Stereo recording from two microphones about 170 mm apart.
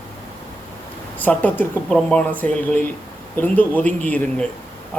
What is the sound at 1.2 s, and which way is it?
Speech, 10° left (ahead or behind).